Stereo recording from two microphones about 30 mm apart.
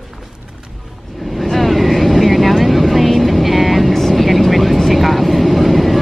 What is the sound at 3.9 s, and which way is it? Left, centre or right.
Vehicle, centre.